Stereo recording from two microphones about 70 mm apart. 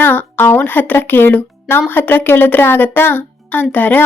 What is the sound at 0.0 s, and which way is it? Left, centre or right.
A woman's voice, left.